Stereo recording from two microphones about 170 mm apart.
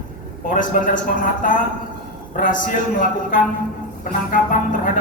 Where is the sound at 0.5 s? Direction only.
50° left (ahead or behind).